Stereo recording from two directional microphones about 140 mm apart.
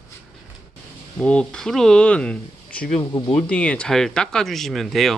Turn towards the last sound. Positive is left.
turn(degrees=0)  # may be behind; listen again after turning